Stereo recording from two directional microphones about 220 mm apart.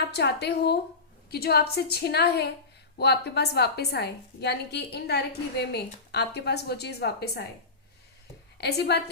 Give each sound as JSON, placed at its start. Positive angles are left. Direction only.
{"t": 0.1, "sound": "a woman's voice", "side_deg": 50}
{"t": 8.5, "sound": "a woman's voice", "side_deg": 50}